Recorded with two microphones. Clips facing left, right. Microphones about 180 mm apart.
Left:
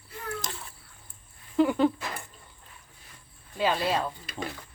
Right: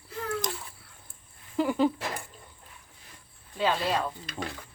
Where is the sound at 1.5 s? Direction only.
5° right (ahead or behind).